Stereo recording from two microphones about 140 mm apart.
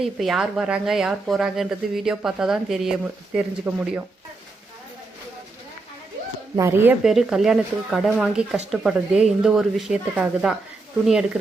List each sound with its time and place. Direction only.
0.0 s speech: centre (ahead or behind)
6.6 s speech: 20° right (ahead or behind)
7.0 s speech: centre (ahead or behind)